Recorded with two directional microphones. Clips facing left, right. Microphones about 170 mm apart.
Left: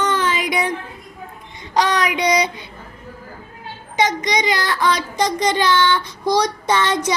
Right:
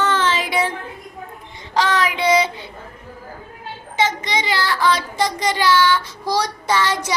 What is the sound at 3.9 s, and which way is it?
Child singing, 15° left (ahead or behind).